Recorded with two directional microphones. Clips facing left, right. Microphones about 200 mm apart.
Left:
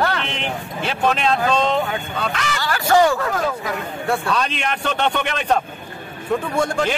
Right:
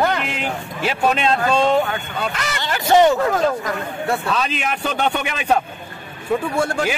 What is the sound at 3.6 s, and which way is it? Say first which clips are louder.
A man's voice: even; centre (ahead or behind).